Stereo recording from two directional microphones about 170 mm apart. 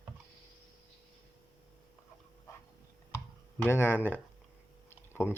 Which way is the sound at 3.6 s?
15° left (ahead or behind).